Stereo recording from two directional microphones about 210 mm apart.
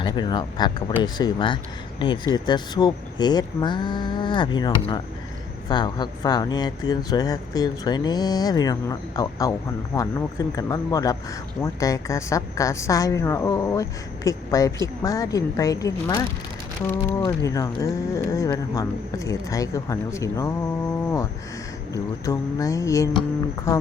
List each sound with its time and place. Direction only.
0.0 s speech: 20° left (ahead or behind)
22.3 s speech: 15° left (ahead or behind)